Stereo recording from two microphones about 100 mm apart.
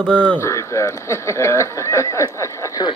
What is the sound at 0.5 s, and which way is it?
Speech, 30° left (ahead or behind).